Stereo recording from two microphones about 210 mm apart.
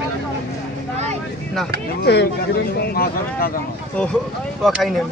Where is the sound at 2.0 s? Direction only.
55° left (ahead or behind).